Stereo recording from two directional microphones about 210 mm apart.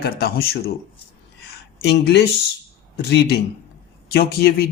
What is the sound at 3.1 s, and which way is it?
A man's voice, 55° left (ahead or behind).